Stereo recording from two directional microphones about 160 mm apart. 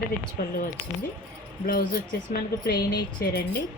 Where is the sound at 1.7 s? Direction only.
65° left (ahead or behind).